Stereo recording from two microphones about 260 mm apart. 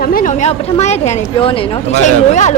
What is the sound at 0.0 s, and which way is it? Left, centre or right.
A woman's voice, left.